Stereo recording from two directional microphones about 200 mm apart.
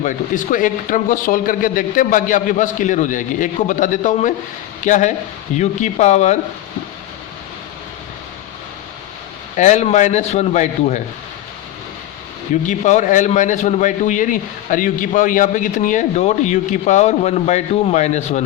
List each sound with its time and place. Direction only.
0.0 s a man's voice: 40° left (ahead or behind)
9.6 s a man's voice: 35° left (ahead or behind)
12.6 s a man's voice: 35° left (ahead or behind)